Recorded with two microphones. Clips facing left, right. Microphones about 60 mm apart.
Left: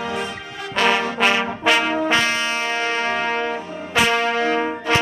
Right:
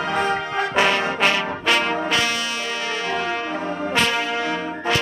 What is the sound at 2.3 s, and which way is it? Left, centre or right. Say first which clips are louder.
Music: left 3 dB; left.